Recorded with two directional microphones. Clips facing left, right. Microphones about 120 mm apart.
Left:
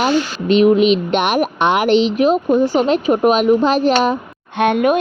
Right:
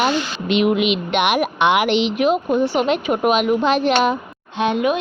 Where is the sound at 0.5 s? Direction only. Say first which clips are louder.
Left 6 dB; 40° left (ahead or behind).